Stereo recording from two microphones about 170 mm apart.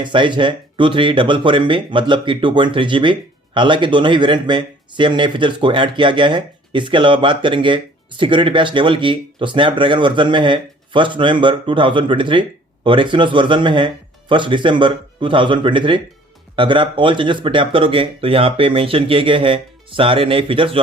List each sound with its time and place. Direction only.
0.0 s speech: 30° right (ahead or behind)